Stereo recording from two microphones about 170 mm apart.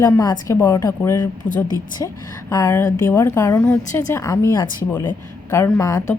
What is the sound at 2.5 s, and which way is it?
A woman's voice, 20° left (ahead or behind).